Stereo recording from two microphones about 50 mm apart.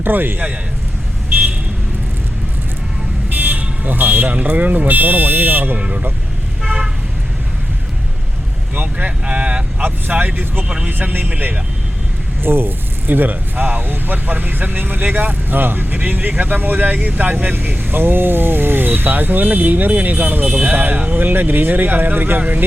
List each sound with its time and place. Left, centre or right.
0.0 s a man's voice: right
3.2 s speech: right
5.7 s speech: right
6.7 s vehicle: centre
8.7 s speech: right
9.8 s speech: right
12.4 s speech: right
21.2 s speech: right